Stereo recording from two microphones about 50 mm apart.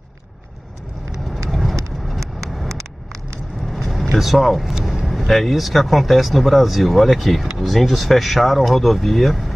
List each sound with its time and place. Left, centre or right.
1.5 s vehicle: centre
2.7 s vehicle: right
3.6 s speech: centre